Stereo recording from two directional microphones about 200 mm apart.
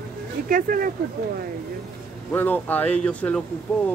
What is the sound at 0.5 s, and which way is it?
Speech, 45° right (ahead or behind).